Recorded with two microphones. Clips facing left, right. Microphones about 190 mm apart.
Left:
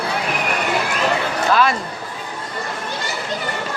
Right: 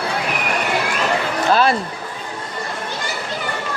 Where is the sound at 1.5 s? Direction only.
35° right (ahead or behind).